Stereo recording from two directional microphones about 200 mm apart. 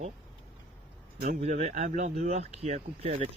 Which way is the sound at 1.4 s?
35° right (ahead or behind).